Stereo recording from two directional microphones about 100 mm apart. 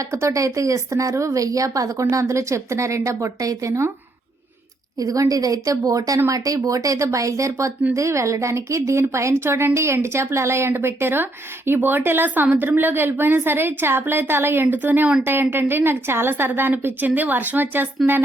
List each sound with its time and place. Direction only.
0.1 s speech: 30° right (ahead or behind)
4.9 s a woman's voice: 35° right (ahead or behind); by 18.2 s 20° right (ahead or behind)